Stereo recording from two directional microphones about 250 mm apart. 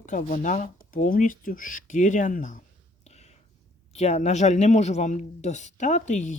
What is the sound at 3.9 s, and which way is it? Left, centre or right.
Speech, left.